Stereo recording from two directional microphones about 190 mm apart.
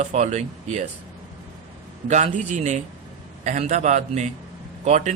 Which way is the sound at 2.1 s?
40° right (ahead or behind).